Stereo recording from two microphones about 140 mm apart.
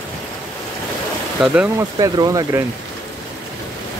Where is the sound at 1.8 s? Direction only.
25° right (ahead or behind).